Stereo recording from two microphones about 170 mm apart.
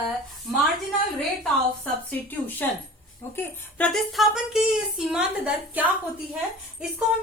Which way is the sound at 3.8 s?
Centre (ahead or behind).